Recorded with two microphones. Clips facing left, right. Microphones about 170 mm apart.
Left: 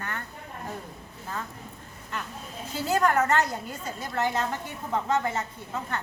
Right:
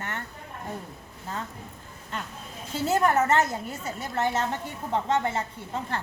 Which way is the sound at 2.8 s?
20° right (ahead or behind).